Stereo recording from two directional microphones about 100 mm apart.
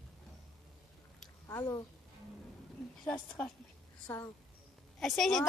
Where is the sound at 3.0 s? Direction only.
10° left (ahead or behind).